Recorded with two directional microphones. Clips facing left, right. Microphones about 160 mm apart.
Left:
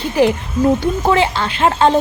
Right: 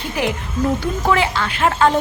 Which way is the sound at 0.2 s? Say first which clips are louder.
Left 7 dB; 30° left (ahead or behind).